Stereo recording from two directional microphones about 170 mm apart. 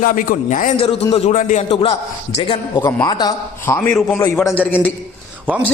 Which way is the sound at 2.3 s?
30° left (ahead or behind).